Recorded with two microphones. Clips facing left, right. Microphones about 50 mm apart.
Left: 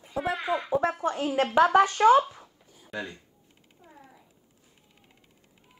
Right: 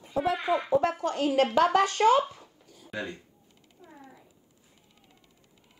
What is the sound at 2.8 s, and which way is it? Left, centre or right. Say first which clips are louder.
Speech: even; centre.